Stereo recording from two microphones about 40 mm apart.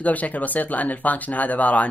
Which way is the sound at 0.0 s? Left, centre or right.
Left.